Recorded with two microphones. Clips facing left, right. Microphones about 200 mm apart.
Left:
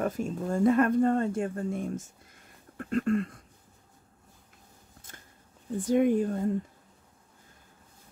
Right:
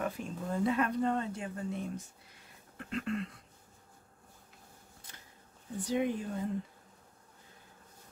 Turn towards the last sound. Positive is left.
turn(degrees=50)  # may be behind; listen again after turning